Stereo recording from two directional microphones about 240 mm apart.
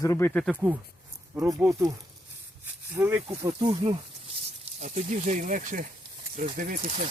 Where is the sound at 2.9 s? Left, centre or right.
Centre.